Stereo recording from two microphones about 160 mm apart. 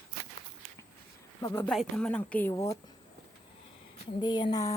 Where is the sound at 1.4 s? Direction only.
15° left (ahead or behind).